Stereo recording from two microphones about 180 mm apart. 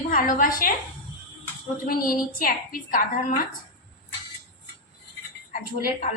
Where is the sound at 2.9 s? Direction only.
50° left (ahead or behind).